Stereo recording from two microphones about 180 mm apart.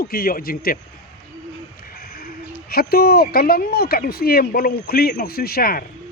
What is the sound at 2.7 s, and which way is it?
A man's voice, 60° left (ahead or behind).